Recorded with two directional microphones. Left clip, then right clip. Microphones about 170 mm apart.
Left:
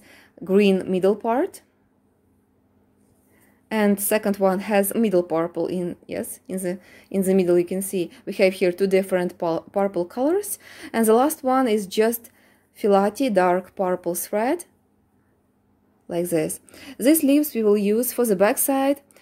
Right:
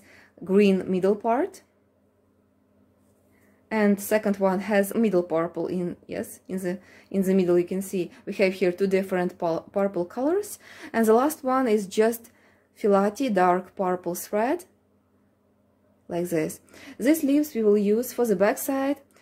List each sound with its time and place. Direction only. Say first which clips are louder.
0.0 s speech: left 3 dB; 30° left (ahead or behind)
3.6 s a woman's voice: left 2 dB; 30° left (ahead or behind)
16.1 s a woman's voice: left 4 dB; 20° left (ahead or behind)